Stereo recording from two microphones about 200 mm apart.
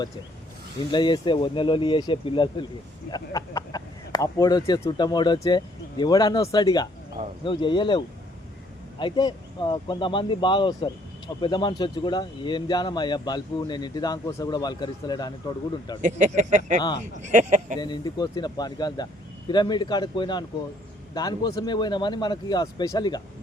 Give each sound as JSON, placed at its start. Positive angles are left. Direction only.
{"t": 0.9, "sound": "speech", "side_deg": 20}
{"t": 16.0, "sound": "speech", "side_deg": -40}
{"t": 17.7, "sound": "speech", "side_deg": 20}